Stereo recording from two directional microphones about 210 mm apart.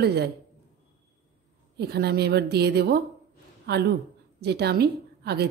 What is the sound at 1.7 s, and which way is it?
A woman's voice, 50° right (ahead or behind).